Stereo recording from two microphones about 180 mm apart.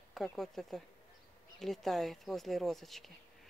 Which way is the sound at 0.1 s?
Centre (ahead or behind).